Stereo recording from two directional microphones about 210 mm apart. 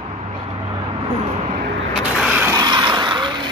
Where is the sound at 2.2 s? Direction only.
5° right (ahead or behind).